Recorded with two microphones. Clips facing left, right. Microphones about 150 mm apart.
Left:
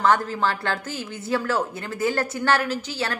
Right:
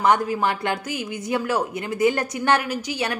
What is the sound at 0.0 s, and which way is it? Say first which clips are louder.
A woman's voice: right 1 dB; 15° right (ahead or behind).